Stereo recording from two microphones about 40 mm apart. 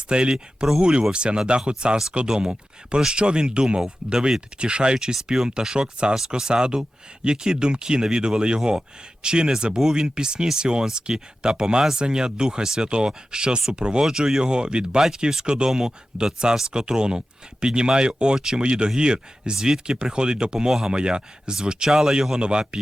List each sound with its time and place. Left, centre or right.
0.1 s speech: right
5.1 s speech: centre
5.5 s speech: right
14.0 s speech: centre
20.7 s speech: centre
20.9 s speech: right